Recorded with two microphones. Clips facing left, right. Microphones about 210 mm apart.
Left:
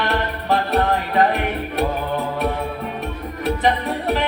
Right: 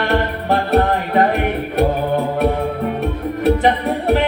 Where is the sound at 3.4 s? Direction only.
55° right (ahead or behind).